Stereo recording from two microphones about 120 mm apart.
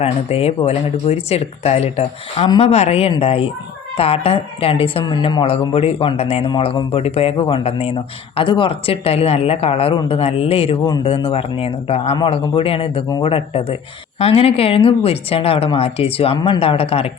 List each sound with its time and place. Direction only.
0.0 s a woman's voice: 55° left (ahead or behind)
5.0 s speech: 35° left (ahead or behind); by 7.3 s 55° left (ahead or behind)
7.3 s speech: 45° left (ahead or behind)
8.4 s a woman's voice: 45° left (ahead or behind)